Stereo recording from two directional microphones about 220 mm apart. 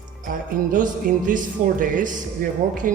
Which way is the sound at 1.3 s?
40° right (ahead or behind).